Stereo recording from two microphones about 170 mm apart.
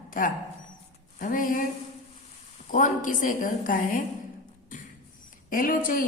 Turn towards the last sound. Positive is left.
turn(degrees=55)  # may be behind; listen again after turning